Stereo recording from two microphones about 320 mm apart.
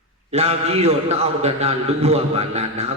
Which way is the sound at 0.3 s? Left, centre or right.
Centre.